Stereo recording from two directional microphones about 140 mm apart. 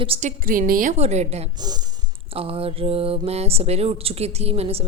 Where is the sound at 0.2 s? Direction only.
70° right (ahead or behind).